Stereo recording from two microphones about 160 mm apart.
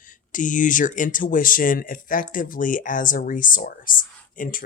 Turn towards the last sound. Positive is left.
turn(degrees=60)  # may be behind; listen again after turning